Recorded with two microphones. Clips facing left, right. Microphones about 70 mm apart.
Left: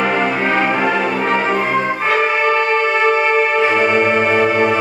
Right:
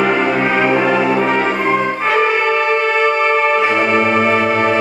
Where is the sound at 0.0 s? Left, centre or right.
Centre.